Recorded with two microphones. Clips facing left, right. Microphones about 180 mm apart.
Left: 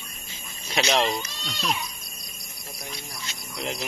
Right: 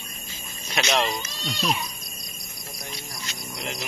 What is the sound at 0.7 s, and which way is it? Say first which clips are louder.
Speech: left 1 dB; 30° left (ahead or behind).